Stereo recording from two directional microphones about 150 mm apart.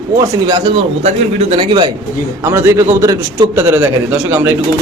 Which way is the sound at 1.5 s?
35° right (ahead or behind).